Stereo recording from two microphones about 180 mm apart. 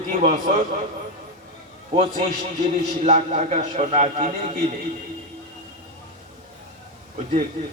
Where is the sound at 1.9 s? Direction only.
45° right (ahead or behind).